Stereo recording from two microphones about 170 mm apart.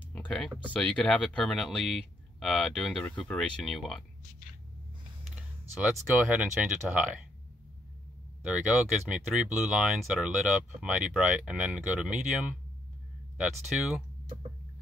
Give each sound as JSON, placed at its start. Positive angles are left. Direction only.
{"t": 0.1, "sound": "a sound", "side_deg": 5}
{"t": 0.7, "sound": "speech", "side_deg": 5}
{"t": 5.3, "sound": "speech", "side_deg": -5}
{"t": 8.5, "sound": "speech", "side_deg": -5}